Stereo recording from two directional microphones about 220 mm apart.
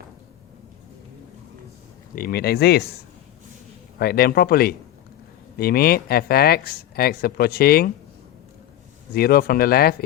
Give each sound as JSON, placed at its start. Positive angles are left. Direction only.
{"t": 2.1, "sound": "speech", "side_deg": 45}
{"t": 3.9, "sound": "speech", "side_deg": 45}
{"t": 9.1, "sound": "speech", "side_deg": 45}